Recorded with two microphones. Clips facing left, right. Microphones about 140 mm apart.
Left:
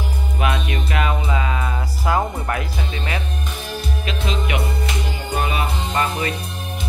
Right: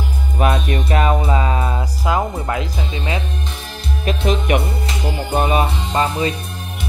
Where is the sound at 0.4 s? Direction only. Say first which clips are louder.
Right 5 dB; 40° right (ahead or behind).